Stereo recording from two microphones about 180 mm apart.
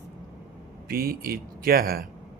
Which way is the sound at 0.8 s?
55° right (ahead or behind).